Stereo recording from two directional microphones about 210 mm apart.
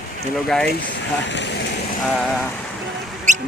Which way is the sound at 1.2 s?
55° left (ahead or behind).